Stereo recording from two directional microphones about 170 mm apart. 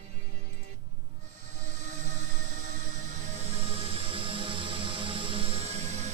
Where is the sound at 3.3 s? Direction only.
40° right (ahead or behind).